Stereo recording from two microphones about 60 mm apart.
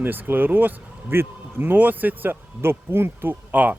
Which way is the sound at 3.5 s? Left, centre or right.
Right.